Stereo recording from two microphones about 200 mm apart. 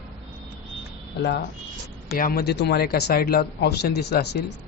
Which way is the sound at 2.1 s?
45° left (ahead or behind).